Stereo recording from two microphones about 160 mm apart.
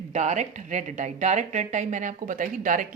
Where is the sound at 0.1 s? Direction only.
45° right (ahead or behind).